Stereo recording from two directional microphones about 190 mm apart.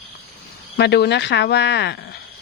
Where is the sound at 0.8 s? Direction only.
60° left (ahead or behind).